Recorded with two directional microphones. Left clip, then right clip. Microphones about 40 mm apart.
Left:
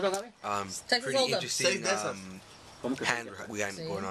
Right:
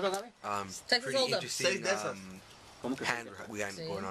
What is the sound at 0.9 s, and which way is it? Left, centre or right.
Speech, right.